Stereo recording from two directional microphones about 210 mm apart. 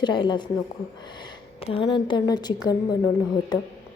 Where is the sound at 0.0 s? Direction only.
20° left (ahead or behind).